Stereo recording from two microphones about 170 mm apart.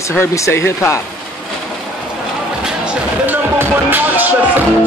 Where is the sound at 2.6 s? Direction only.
10° right (ahead or behind).